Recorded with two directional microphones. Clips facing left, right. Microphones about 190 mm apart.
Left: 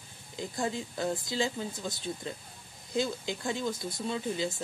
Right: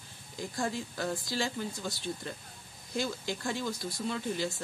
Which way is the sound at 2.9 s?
20° left (ahead or behind).